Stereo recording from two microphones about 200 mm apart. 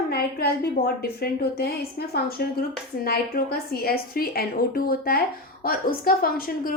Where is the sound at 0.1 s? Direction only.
50° left (ahead or behind).